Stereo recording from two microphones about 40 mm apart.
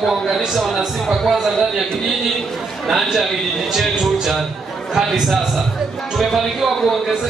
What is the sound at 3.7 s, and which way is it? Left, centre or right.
Speech, centre.